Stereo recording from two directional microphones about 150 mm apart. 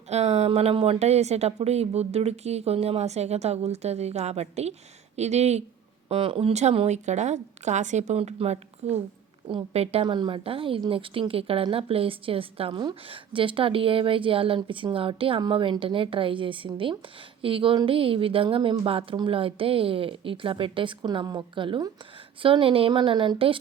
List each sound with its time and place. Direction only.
0.1 s a woman's voice: 45° right (ahead or behind)